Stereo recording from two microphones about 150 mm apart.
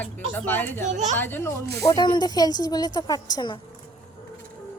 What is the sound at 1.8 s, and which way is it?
A woman's voice, 30° left (ahead or behind).